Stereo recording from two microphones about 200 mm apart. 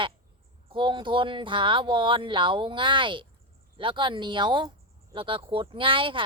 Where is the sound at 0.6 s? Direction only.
25° right (ahead or behind).